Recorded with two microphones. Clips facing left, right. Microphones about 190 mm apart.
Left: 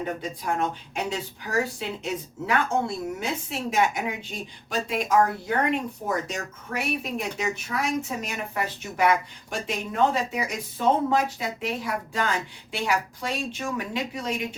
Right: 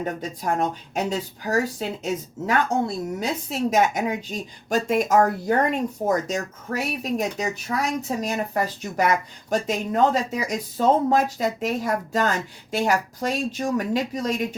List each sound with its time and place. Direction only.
0.0 s speech: 40° right (ahead or behind)